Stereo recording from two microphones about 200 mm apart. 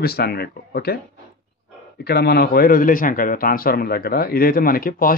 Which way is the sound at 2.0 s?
55° left (ahead or behind).